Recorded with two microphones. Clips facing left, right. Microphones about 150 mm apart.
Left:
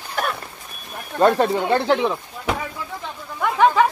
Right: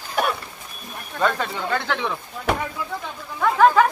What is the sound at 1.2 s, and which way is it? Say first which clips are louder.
Speech: left 7 dB; 40° left (ahead or behind).